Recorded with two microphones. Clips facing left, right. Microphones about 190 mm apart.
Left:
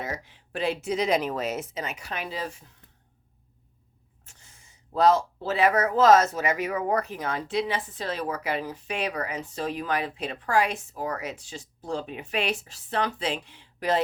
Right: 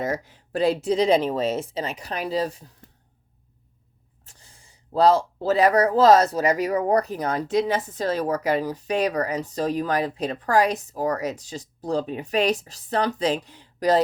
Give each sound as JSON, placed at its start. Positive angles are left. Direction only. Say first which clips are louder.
{"t": 0.0, "sound": "speech", "louder": "right 7 dB", "side_deg": -40}
{"t": 4.3, "sound": "speech", "louder": "right 3 dB", "side_deg": -35}